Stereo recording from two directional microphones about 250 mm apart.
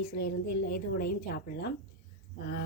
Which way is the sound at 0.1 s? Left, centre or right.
Left.